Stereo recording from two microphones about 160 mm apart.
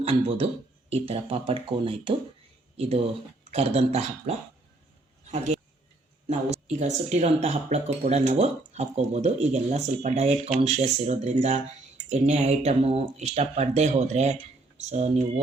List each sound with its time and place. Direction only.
0.0 s speech: 40° right (ahead or behind)
6.2 s speech: 45° right (ahead or behind)